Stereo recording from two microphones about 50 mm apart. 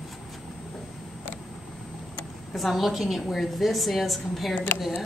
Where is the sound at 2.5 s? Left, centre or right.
Centre.